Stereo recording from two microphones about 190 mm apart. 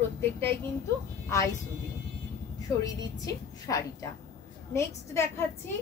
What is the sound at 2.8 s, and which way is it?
Speech, 20° left (ahead or behind).